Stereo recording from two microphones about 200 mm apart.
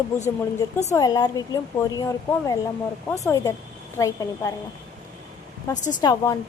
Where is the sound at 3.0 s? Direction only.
15° left (ahead or behind).